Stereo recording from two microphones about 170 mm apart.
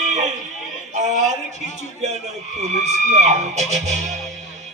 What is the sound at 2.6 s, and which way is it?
Speech, 40° right (ahead or behind).